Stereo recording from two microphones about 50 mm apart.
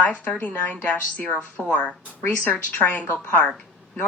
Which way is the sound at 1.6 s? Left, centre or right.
Centre.